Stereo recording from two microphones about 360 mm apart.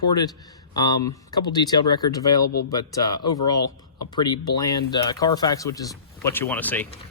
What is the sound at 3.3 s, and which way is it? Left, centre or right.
Speech, left.